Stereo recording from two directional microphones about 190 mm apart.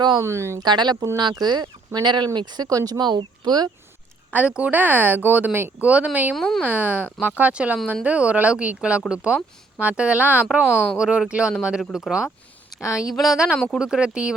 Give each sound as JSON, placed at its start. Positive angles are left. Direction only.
{"t": 0.0, "sound": "speech", "side_deg": -20}
{"t": 4.3, "sound": "speech", "side_deg": -5}